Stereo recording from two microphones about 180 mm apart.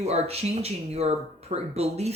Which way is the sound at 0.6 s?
35° right (ahead or behind).